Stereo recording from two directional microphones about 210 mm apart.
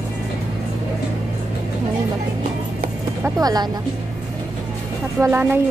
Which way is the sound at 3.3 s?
20° right (ahead or behind).